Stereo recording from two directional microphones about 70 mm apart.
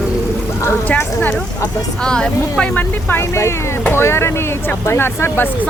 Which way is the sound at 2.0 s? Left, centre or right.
Centre.